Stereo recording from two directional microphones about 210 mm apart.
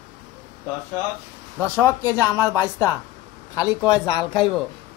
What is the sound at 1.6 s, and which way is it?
Speech, 10° left (ahead or behind).